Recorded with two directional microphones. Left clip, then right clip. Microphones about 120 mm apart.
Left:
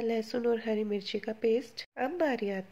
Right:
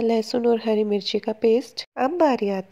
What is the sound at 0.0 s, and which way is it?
A woman's voice, 45° right (ahead or behind).